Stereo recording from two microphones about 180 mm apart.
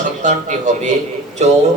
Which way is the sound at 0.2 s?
45° right (ahead or behind).